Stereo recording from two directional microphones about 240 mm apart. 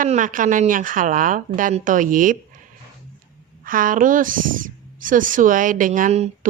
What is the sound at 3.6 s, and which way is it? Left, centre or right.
Speech, right.